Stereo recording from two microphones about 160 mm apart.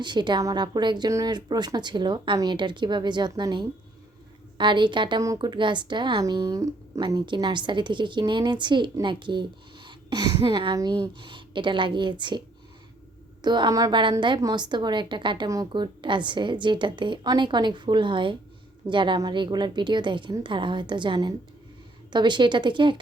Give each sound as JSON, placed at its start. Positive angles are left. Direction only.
{"t": 0.0, "sound": "a woman's voice", "side_deg": -30}
{"t": 13.4, "sound": "a woman's voice", "side_deg": -25}